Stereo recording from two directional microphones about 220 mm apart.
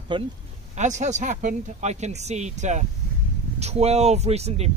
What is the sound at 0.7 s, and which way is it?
A man's voice, 35° right (ahead or behind).